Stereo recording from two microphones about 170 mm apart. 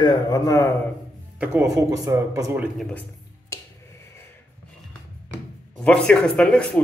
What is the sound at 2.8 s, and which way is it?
Speech, 5° left (ahead or behind).